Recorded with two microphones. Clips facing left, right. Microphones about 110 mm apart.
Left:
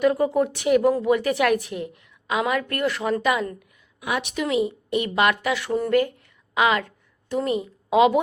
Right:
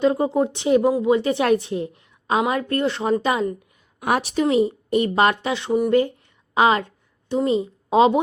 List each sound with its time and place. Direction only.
0.0 s a woman's voice: 25° right (ahead or behind)